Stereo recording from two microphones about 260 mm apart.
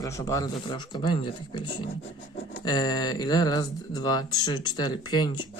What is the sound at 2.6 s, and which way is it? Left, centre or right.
Speech, centre.